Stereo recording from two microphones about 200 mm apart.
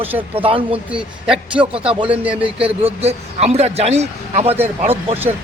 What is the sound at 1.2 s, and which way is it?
A man's voice, 5° right (ahead or behind).